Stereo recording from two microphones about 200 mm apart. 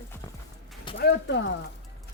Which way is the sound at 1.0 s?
60° left (ahead or behind).